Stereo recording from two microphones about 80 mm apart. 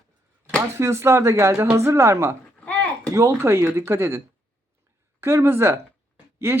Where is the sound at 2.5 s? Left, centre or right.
Centre.